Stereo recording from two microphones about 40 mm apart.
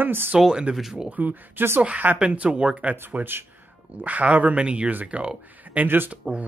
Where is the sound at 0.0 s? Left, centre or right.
Right.